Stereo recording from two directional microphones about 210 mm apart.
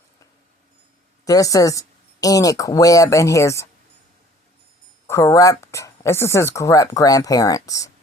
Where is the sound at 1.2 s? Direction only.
15° left (ahead or behind).